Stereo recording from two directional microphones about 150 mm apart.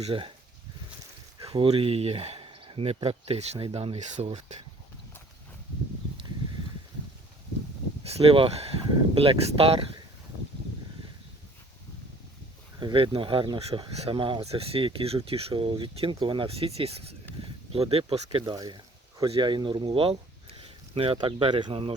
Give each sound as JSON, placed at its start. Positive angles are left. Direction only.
{"t": 0.0, "sound": "speech", "side_deg": -35}
{"t": 1.4, "sound": "speech", "side_deg": -40}
{"t": 8.0, "sound": "speech", "side_deg": -40}
{"t": 12.8, "sound": "speech", "side_deg": -35}